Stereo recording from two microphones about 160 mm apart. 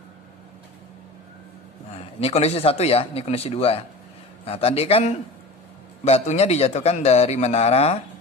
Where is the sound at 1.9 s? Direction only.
40° left (ahead or behind).